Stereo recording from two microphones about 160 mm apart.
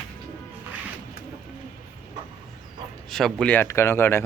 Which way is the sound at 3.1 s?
Centre (ahead or behind).